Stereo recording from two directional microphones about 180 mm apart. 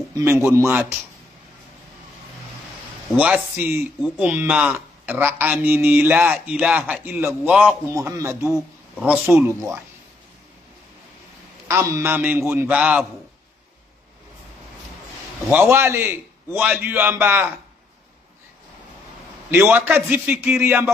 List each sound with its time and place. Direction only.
0.1 s a man's voice: 15° right (ahead or behind)
3.2 s speech: 10° right (ahead or behind)
7.9 s speech: 20° right (ahead or behind)
11.9 s speech: 10° right (ahead or behind)
15.4 s speech: 10° right (ahead or behind)
19.5 s speech: 10° right (ahead or behind)